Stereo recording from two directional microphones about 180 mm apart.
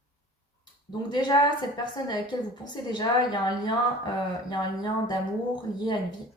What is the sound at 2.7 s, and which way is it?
Speech, 25° left (ahead or behind).